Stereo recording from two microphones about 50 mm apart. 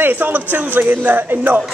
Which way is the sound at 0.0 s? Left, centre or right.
Right.